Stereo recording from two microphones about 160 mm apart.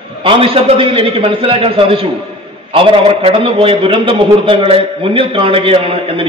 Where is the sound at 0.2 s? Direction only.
35° right (ahead or behind).